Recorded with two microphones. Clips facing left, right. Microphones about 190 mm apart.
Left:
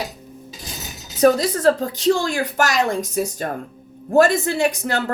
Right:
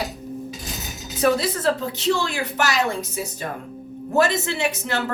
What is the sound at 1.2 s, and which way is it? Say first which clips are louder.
A woman's voice: left 5 dB; 40° left (ahead or behind).